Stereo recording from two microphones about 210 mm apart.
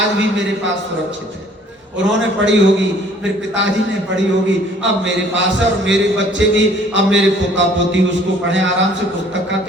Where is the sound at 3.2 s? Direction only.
60° right (ahead or behind).